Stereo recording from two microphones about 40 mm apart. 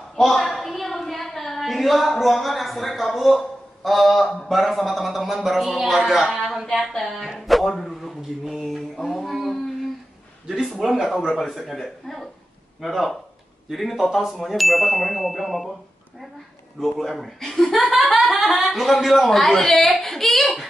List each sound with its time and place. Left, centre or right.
0.3 s a man's voice: centre
10.6 s a man's voice: centre
16.8 s a man's voice: centre